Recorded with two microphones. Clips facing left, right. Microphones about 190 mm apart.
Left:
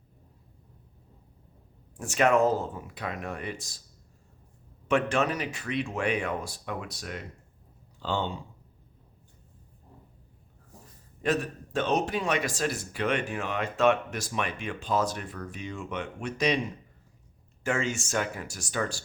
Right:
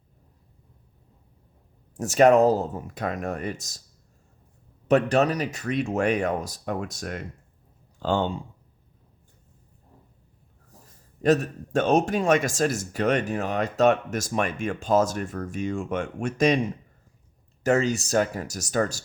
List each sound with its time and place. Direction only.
2.0 s speech: 40° right (ahead or behind)
4.9 s speech: 40° right (ahead or behind)
11.2 s speech: 40° right (ahead or behind)
17.6 s speech: 40° right (ahead or behind)